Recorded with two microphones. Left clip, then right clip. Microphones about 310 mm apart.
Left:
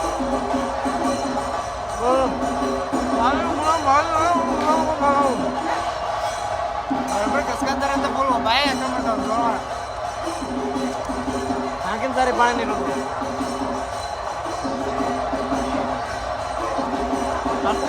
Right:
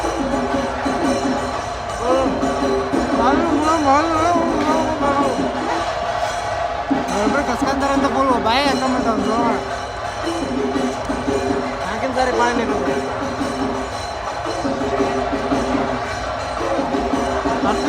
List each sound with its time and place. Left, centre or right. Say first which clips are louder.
3.2 s music: right 4 dB; centre
7.6 s a man's voice: right 3 dB; centre
12.2 s speech: right 1 dB; centre